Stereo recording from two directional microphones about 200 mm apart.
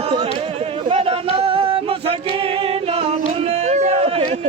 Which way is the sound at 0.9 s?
30° right (ahead or behind).